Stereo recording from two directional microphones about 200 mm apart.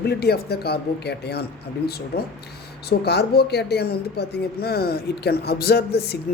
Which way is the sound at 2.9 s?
55° left (ahead or behind).